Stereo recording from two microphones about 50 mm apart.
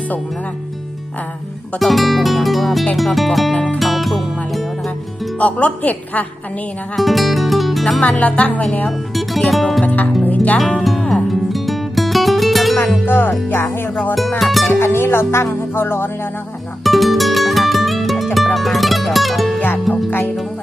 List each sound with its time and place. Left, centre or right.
1.8 s music: centre
3.5 s music: centre
3.8 s music: centre
5.4 s speech: left
6.9 s music: centre
8.0 s speech: left
8.9 s music: centre
9.8 s music: left
11.1 s music: centre
13.1 s music: left
14.2 s music: centre
14.7 s music: left
16.8 s music: centre
19.5 s music: left